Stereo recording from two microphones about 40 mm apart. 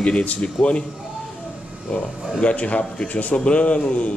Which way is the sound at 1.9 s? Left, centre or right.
Left.